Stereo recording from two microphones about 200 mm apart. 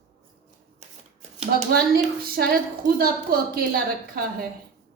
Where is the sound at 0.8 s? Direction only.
35° right (ahead or behind).